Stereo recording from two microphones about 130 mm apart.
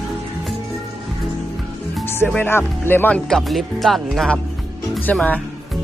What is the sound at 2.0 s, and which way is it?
Speech, 15° left (ahead or behind).